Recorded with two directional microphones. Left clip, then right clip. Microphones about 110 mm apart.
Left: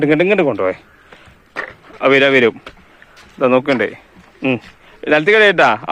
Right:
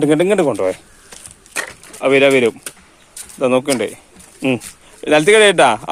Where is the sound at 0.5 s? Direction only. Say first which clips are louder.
Even; 30° right (ahead or behind).